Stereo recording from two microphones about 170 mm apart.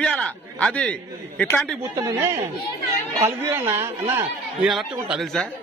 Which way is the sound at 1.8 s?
15° right (ahead or behind).